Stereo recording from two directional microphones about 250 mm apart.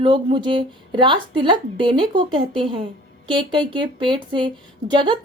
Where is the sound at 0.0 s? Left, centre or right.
Centre.